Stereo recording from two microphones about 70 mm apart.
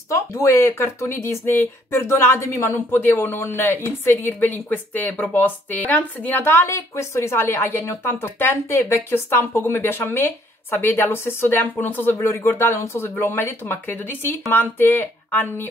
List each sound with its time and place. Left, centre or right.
0.1 s speech: left
8.0 s speech: left